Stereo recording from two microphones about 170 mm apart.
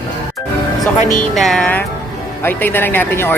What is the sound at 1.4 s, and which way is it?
Music, 5° left (ahead or behind).